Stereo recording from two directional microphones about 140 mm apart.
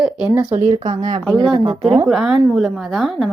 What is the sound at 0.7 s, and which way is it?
Speech, 25° right (ahead or behind).